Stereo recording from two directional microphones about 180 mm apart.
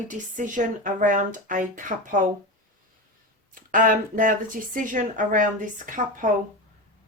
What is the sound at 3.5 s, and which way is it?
Speech, 50° right (ahead or behind).